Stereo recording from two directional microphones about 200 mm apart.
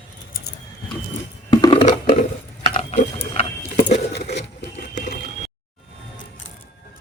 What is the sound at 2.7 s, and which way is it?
Ratchet, 35° left (ahead or behind).